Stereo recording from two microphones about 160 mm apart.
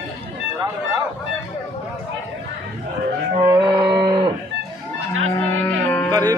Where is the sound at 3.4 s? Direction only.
25° right (ahead or behind).